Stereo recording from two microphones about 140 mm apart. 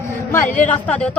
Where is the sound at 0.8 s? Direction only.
10° left (ahead or behind).